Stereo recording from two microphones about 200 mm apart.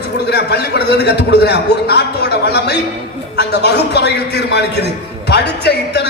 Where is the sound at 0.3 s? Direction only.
55° left (ahead or behind).